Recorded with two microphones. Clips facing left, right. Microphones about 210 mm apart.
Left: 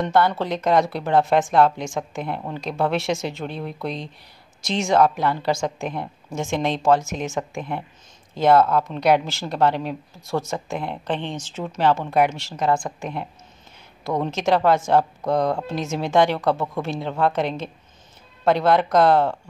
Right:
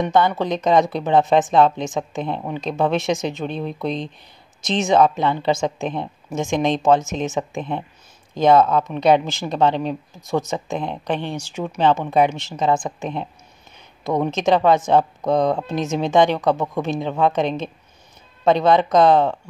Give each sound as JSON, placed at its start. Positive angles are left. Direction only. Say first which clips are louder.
{"t": 0.0, "sound": "a woman's voice", "louder": "right 2 dB", "side_deg": -15}